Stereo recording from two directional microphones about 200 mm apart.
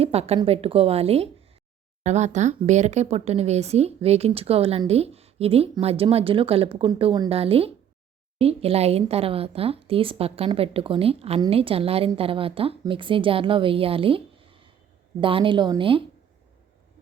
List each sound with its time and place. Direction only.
0.0 s speech: 30° right (ahead or behind)